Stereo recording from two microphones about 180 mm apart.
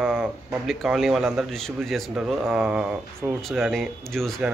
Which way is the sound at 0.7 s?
Centre (ahead or behind).